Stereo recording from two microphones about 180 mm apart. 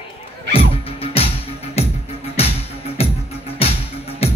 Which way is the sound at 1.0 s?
30° left (ahead or behind).